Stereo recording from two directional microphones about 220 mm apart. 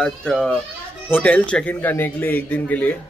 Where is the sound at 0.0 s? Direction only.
5° left (ahead or behind).